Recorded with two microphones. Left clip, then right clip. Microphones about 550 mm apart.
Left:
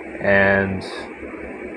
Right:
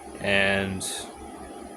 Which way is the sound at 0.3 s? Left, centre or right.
Right.